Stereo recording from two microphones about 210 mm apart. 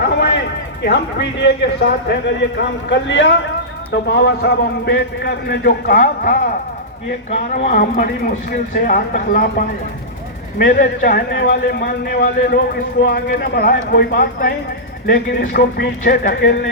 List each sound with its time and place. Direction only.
0.8 s speech: 55° left (ahead or behind)